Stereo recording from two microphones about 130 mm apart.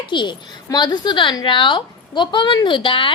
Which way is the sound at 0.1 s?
35° left (ahead or behind).